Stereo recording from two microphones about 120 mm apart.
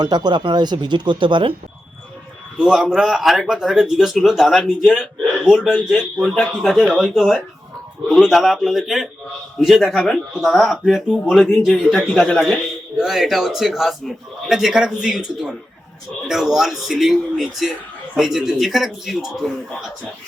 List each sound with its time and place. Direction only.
0.0 s speech: 35° right (ahead or behind)
2.6 s a man's voice: 5° right (ahead or behind)